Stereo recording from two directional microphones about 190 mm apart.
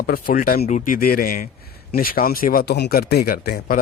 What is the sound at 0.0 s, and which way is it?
Speech, 50° left (ahead or behind).